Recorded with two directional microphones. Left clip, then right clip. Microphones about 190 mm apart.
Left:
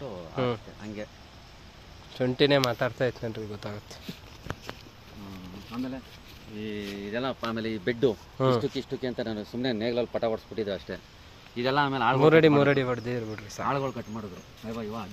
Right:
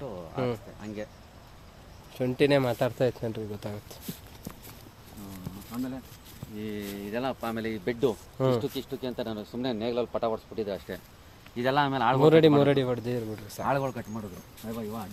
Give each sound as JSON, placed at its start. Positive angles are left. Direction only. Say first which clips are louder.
{"t": 0.0, "sound": "a sound", "louder": "left 2 dB", "side_deg": -5}
{"t": 0.8, "sound": "speech", "louder": "even", "side_deg": -10}
{"t": 2.1, "sound": "speech", "louder": "left 1 dB", "side_deg": 0}
{"t": 2.5, "sound": "speech", "louder": "left 1 dB", "side_deg": -15}
{"t": 2.7, "sound": "speech", "louder": "right 1 dB", "side_deg": -30}
{"t": 5.7, "sound": "speech", "louder": "left 1 dB", "side_deg": -20}
{"t": 6.8, "sound": "speech", "louder": "left 1 dB", "side_deg": 0}
{"t": 7.4, "sound": "speech", "louder": "left 1 dB", "side_deg": 30}
{"t": 8.4, "sound": "speech", "louder": "left 1 dB", "side_deg": -5}
{"t": 8.7, "sound": "speech", "louder": "left 2 dB", "side_deg": 50}
{"t": 11.5, "sound": "speech", "louder": "even", "side_deg": -15}
{"t": 13.7, "sound": "speech", "louder": "even", "side_deg": -25}